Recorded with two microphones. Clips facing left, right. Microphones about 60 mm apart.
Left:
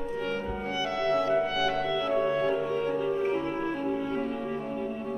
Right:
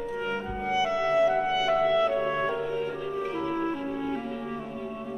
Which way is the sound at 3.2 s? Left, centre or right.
Left.